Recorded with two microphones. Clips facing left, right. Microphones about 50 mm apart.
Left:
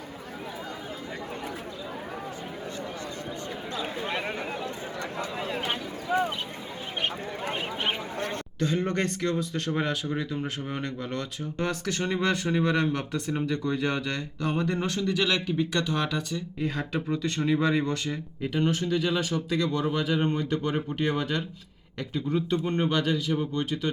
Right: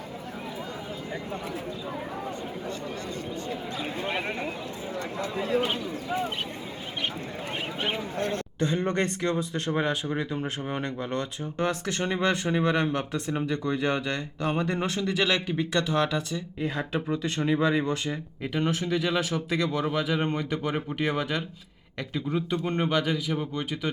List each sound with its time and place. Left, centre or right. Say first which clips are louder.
8.5 s speech: even; right; by 16.4 s centre
16.6 s speech: right 1 dB; centre
18.1 s speech: left 1 dB; centre